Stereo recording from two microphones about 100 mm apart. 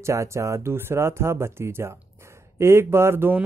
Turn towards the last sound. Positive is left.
turn(degrees=-20)  # may be behind; listen again after turning